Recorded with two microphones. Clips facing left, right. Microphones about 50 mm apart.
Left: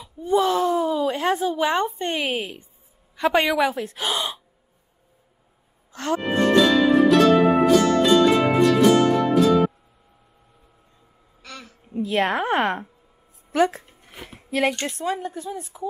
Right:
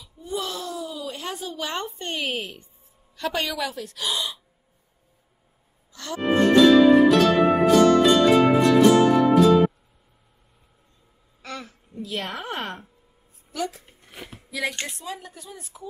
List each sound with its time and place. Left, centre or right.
0.0 s a sound: left
1.5 s a woman's voice: left
3.2 s a woman's voice: left
5.9 s music: left
6.2 s music: centre
11.4 s a sound: right
11.9 s a woman's voice: left
14.0 s a sound: centre
14.5 s a woman's voice: left